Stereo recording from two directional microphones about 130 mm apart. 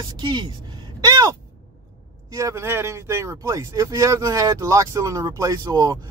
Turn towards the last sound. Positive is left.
turn(degrees=-30)  # may be behind; listen again after turning